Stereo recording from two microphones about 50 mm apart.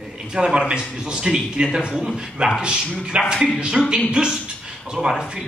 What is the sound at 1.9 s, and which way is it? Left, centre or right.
Speech, centre.